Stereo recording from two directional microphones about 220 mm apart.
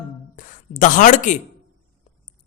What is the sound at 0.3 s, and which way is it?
A woman's voice, 35° left (ahead or behind).